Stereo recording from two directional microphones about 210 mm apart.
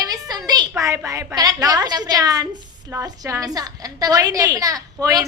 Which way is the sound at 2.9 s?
15° right (ahead or behind).